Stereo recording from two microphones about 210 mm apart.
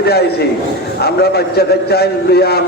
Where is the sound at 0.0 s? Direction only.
50° left (ahead or behind).